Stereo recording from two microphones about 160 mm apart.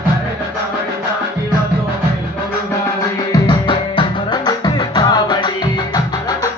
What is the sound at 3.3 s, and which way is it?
Music, 30° left (ahead or behind).